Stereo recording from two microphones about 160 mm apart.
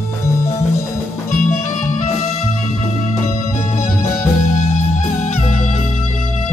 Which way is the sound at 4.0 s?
45° left (ahead or behind).